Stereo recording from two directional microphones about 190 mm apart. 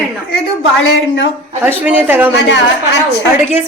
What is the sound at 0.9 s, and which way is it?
Speech, 80° left.